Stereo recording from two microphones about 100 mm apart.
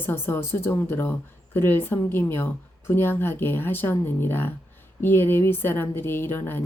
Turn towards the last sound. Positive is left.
turn(degrees=20)  # may be behind; listen again after turning